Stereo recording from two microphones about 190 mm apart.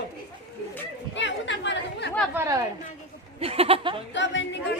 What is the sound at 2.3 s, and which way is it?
Speech, 15° right (ahead or behind).